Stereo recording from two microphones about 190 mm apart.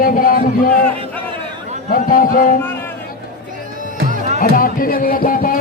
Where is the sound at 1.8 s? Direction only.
45° left (ahead or behind).